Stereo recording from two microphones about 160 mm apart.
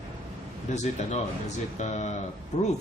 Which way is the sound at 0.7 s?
50° left (ahead or behind).